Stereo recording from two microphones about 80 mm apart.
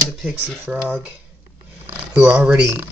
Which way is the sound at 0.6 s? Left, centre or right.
Centre.